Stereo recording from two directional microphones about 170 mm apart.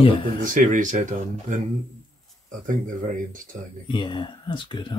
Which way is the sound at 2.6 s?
50° right (ahead or behind).